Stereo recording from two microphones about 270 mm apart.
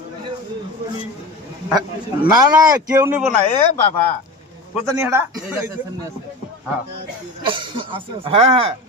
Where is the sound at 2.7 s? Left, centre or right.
Centre.